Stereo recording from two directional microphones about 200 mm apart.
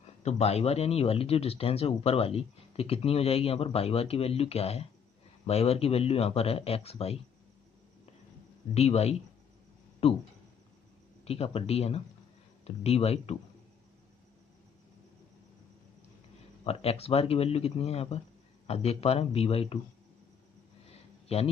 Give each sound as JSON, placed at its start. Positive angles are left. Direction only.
{"t": 0.2, "sound": "speech", "side_deg": 35}
{"t": 8.7, "sound": "speech", "side_deg": 30}
{"t": 11.2, "sound": "speech", "side_deg": 30}
{"t": 16.6, "sound": "speech", "side_deg": 30}
{"t": 21.3, "sound": "speech", "side_deg": 30}